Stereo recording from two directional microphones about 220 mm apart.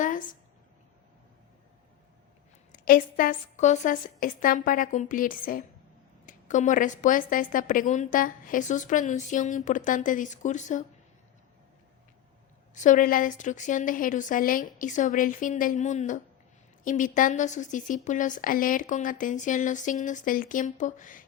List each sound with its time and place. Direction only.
0.0 s a sound: 35° left (ahead or behind)
2.8 s a woman's voice: 40° left (ahead or behind)
12.7 s a woman's voice: 35° left (ahead or behind)